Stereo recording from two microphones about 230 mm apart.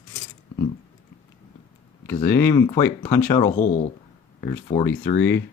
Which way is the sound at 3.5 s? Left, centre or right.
Left.